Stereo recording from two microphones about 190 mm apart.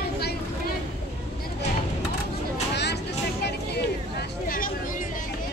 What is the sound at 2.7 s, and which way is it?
Vehicle, 60° left (ahead or behind).